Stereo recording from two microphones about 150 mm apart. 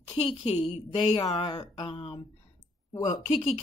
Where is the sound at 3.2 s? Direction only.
45° left (ahead or behind).